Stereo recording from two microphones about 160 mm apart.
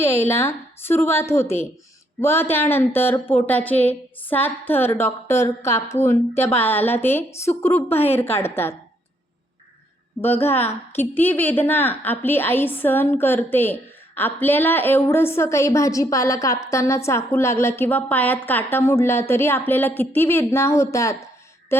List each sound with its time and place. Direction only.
0.0 s a woman's voice: 15° left (ahead or behind)
10.2 s a woman's voice: 15° left (ahead or behind)
21.7 s a sound: 15° left (ahead or behind)